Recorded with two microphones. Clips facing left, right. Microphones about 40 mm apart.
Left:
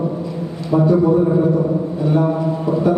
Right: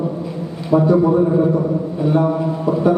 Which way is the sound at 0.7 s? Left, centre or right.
Centre.